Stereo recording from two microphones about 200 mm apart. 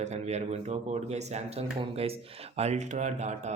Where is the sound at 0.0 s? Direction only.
35° right (ahead or behind).